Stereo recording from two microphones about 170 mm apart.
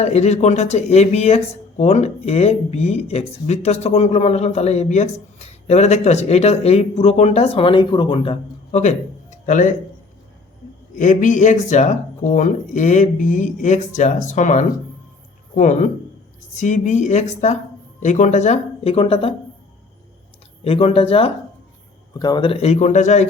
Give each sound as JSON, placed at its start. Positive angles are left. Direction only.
{"t": 0.0, "sound": "speech", "side_deg": 40}
{"t": 8.8, "sound": "speech", "side_deg": 45}
{"t": 10.9, "sound": "speech", "side_deg": 50}
{"t": 20.7, "sound": "speech", "side_deg": 35}